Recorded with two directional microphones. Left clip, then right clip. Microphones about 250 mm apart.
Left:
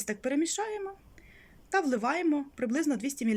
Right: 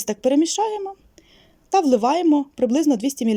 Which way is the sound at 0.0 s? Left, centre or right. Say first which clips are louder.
Right 12 dB; right.